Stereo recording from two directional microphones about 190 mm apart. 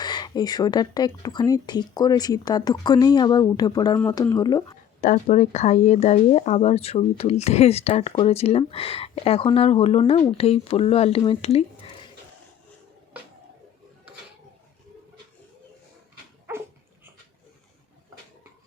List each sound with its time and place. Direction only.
0.0 s speech: 20° left (ahead or behind)
4.9 s speech: 40° left (ahead or behind)
16.5 s dog: 10° right (ahead or behind)